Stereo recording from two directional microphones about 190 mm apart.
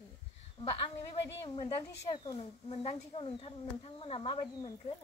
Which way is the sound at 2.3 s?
30° left (ahead or behind).